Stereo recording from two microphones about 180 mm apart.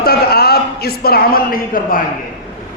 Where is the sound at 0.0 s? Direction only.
60° left (ahead or behind).